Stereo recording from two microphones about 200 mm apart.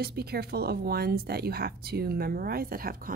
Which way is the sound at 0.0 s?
50° right (ahead or behind).